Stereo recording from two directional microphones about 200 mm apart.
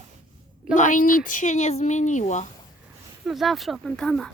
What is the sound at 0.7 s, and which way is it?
Speech, 40° left (ahead or behind).